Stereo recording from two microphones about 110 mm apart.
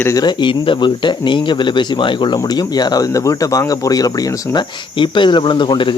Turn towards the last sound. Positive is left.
turn(degrees=45)  # may be behind; listen again after turning